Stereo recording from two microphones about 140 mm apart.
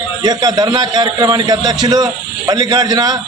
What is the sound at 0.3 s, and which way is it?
A man's voice, 30° right (ahead or behind).